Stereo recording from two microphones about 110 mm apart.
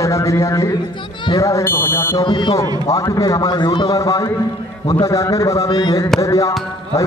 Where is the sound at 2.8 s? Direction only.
30° left (ahead or behind).